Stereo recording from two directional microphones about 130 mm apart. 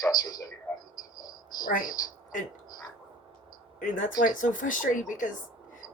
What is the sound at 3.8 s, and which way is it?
Speech, 90° left.